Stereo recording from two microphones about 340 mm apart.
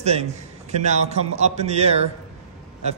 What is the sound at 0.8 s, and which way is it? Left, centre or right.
A man's voice, centre.